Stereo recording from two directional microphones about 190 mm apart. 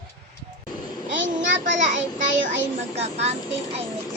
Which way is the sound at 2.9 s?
35° right (ahead or behind).